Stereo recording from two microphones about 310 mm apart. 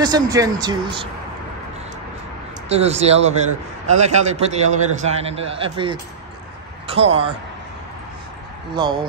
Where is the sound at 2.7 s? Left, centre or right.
Centre.